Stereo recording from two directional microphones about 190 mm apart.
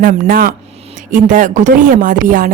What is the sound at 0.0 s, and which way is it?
Speech, 50° right (ahead or behind).